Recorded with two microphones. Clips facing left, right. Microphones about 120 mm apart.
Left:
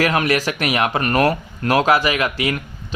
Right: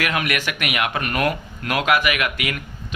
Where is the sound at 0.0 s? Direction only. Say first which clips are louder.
Left 6 dB; 35° left (ahead or behind).